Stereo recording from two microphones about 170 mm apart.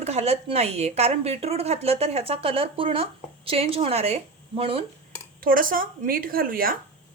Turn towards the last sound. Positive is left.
turn(degrees=-60)  # may be behind; listen again after turning